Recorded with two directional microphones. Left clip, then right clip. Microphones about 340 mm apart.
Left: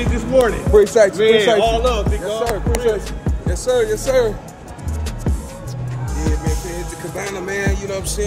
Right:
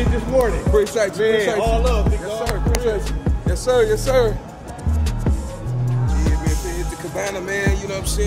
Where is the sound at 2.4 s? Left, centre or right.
Centre.